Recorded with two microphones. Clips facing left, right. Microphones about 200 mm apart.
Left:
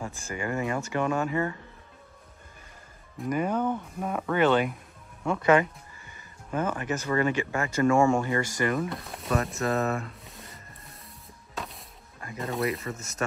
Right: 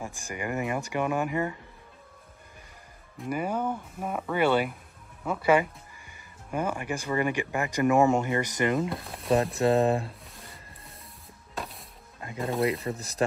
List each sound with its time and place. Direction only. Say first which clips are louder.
0.0 s speech: left 1 dB; 15° right (ahead or behind)
3.2 s speech: left 2 dB; 10° right (ahead or behind)
8.9 s speech: right 1 dB; centre (ahead or behind)
9.3 s speech: right 4 dB; 30° right (ahead or behind)
11.5 s music: right 1 dB; centre (ahead or behind)
12.4 s speech: right 3 dB; centre (ahead or behind)
12.8 s speech: right 3 dB; 35° right (ahead or behind)